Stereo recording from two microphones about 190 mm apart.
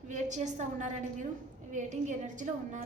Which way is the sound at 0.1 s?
40° right (ahead or behind).